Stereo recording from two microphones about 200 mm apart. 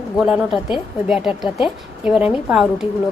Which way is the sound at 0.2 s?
5° right (ahead or behind).